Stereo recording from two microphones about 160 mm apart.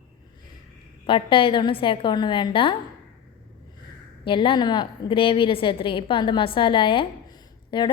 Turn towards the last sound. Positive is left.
turn(degrees=30)  # may be behind; listen again after turning